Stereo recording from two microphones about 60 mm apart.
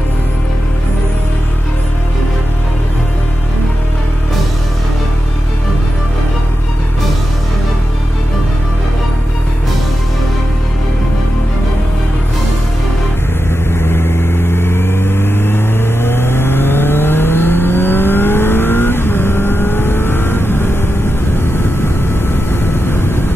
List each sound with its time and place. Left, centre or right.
13.7 s vehicle: left
22.8 s vehicle: left